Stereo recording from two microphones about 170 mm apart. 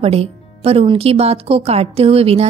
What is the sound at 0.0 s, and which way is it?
A woman's voice, 35° right (ahead or behind).